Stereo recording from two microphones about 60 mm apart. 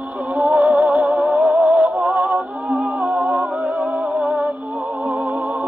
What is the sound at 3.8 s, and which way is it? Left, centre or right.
Music, right.